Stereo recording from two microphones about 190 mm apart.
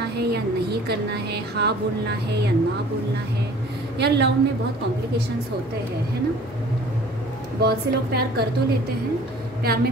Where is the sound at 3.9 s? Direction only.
60° right (ahead or behind).